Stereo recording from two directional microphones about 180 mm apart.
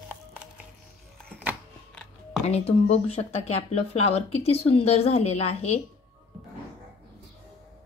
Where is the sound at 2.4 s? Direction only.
35° left (ahead or behind).